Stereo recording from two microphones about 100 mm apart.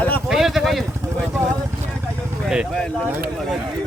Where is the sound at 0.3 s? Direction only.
5° right (ahead or behind).